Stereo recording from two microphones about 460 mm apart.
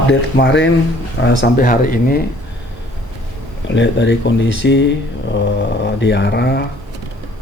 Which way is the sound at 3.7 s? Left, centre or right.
Left.